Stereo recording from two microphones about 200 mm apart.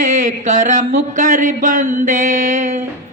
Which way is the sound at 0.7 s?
40° right (ahead or behind).